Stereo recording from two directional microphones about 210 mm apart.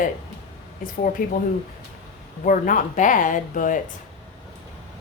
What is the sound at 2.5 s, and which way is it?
Speech, 40° left (ahead or behind).